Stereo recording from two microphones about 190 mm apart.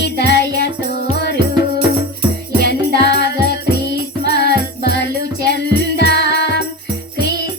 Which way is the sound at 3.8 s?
50° right (ahead or behind).